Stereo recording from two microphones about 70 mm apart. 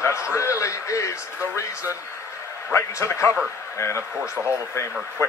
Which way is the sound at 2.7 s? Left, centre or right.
Left.